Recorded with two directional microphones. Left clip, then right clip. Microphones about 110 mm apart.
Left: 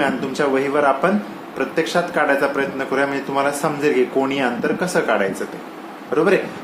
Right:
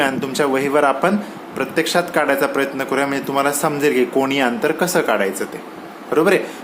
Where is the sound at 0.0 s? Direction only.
90° right.